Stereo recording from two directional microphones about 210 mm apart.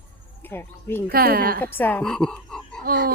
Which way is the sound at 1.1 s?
45° right (ahead or behind).